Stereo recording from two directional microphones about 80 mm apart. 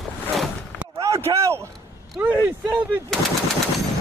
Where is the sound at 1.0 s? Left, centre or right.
Right.